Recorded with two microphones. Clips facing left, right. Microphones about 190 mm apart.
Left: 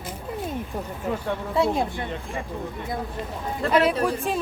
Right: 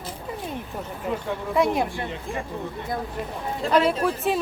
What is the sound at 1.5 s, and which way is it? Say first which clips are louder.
Speech: right 1 dB; 30° left (ahead or behind).